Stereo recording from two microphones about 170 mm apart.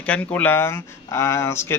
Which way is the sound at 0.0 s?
10° left (ahead or behind).